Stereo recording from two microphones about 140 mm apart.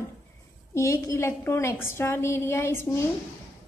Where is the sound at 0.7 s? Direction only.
20° left (ahead or behind).